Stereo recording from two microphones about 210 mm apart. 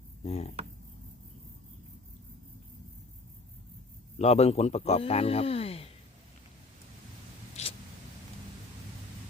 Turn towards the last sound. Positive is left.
turn(degrees=30)  # may be behind; listen again after turning